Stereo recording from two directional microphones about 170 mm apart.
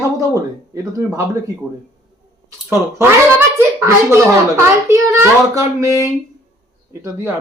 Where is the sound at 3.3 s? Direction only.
15° right (ahead or behind).